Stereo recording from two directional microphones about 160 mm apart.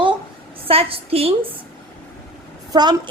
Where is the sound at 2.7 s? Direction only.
25° right (ahead or behind).